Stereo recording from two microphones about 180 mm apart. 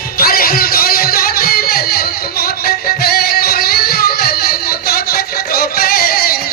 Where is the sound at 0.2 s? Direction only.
55° left (ahead or behind).